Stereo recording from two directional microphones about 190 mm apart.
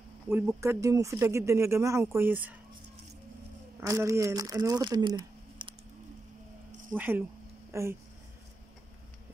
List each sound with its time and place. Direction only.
0.3 s speech: 15° right (ahead or behind)
3.8 s speech: 15° right (ahead or behind)
5.6 s a sound: 25° right (ahead or behind)
7.0 s speech: 10° right (ahead or behind)